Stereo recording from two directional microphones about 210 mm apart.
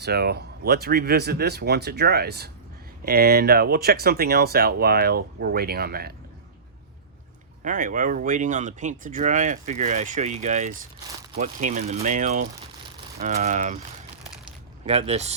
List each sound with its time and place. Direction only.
0.0 s speech: 50° right (ahead or behind)
7.6 s speech: 40° right (ahead or behind)
14.8 s speech: 30° right (ahead or behind)